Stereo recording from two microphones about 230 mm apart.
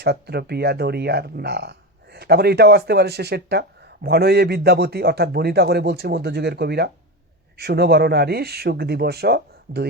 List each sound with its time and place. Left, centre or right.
0.0 s speech: right